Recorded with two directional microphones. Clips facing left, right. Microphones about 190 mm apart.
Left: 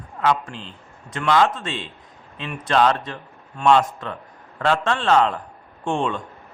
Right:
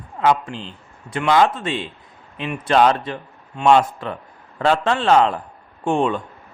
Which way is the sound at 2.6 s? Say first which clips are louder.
Right 3 dB; 25° right (ahead or behind).